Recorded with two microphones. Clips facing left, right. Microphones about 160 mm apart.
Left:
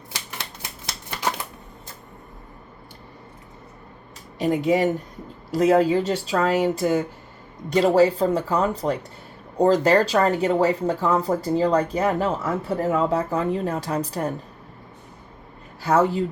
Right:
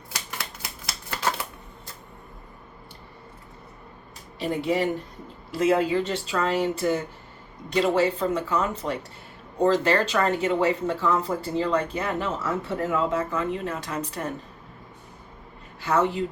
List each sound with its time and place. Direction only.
4.4 s speech: 45° left (ahead or behind)
15.8 s speech: 35° left (ahead or behind)